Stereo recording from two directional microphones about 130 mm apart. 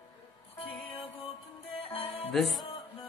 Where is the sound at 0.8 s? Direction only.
45° left (ahead or behind).